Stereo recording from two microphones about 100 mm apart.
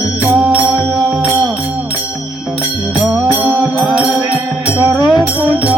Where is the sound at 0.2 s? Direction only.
Centre (ahead or behind).